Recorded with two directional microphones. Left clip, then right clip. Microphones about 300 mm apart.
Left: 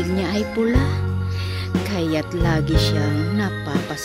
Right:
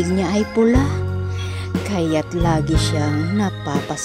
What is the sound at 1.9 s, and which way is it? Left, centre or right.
Speech, centre.